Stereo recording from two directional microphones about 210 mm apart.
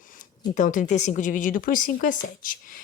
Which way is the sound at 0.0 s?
40° left (ahead or behind).